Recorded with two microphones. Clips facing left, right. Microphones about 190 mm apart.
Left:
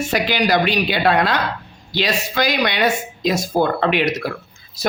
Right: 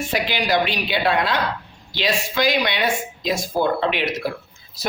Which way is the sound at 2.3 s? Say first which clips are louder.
Even; 40° left (ahead or behind).